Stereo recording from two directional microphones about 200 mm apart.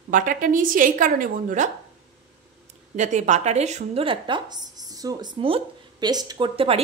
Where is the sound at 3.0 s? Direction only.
35° right (ahead or behind).